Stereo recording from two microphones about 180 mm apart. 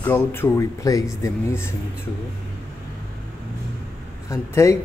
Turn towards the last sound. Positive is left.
turn(degrees=15)  # may be behind; listen again after turning